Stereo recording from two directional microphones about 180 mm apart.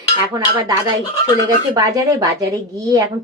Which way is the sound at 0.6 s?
20° right (ahead or behind).